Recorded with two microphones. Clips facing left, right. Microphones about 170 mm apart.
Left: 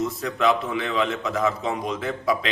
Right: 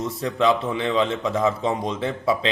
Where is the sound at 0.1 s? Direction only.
30° right (ahead or behind).